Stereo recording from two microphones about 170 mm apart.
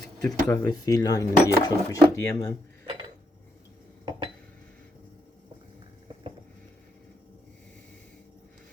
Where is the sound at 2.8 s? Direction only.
25° right (ahead or behind).